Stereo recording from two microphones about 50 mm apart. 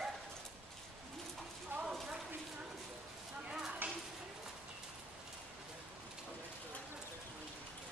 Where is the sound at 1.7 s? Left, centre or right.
Right.